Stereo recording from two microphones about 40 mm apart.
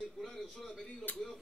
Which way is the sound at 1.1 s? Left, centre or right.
Left.